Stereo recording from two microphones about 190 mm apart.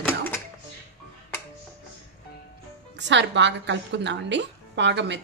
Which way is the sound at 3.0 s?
70° right (ahead or behind).